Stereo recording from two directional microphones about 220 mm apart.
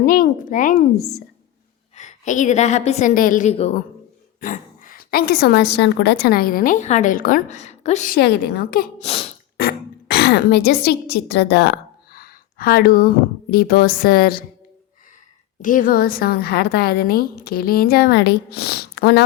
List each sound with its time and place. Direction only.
0.0 s a woman's voice: 40° left (ahead or behind)
2.0 s a woman's voice: 35° left (ahead or behind)
9.0 s throat clearing: 25° left (ahead or behind)
9.6 s throat clearing: 45° left (ahead or behind)
13.5 s a woman's voice: 45° left (ahead or behind)
15.6 s a woman's voice: 35° left (ahead or behind)